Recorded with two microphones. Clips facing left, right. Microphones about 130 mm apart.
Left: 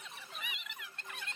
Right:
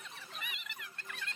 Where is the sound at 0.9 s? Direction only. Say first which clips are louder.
Right 1 dB; 25° left (ahead or behind).